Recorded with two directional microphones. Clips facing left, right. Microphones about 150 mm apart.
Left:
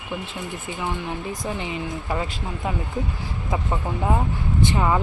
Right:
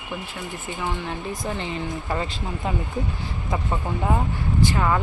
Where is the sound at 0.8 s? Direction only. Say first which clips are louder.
Even; 15° left (ahead or behind).